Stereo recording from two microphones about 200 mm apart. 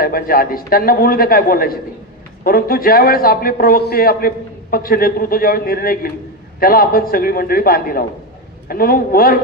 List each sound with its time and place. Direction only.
0.0 s a man's voice: 45° left (ahead or behind)